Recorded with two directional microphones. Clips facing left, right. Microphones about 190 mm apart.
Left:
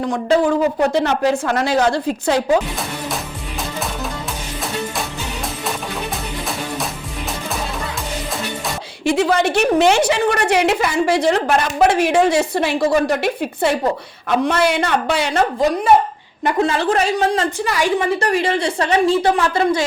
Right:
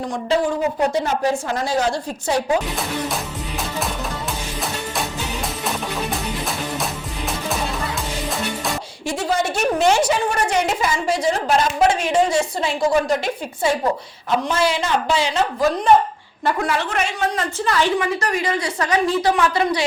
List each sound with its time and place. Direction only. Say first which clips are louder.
0.1 s a woman's voice: left 4 dB; 55° left (ahead or behind); by 2.4 s 90° left
9.0 s a woman's voice: left 6 dB; 65° left (ahead or behind)
16.4 s a woman's voice: left 4 dB; 20° left (ahead or behind)
17.6 s a woman's voice: even; 10° left (ahead or behind)
18.2 s a woman's voice: left 4 dB; 30° left (ahead or behind)